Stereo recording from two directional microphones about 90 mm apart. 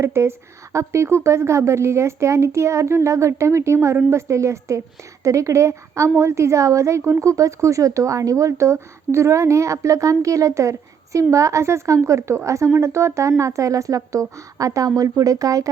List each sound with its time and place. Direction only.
0.0 s a woman's voice: 30° right (ahead or behind)